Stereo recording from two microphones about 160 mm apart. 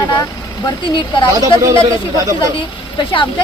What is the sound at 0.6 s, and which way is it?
Speech, 30° left (ahead or behind).